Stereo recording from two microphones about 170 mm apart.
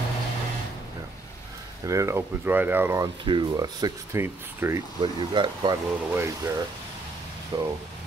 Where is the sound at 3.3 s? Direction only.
25° right (ahead or behind).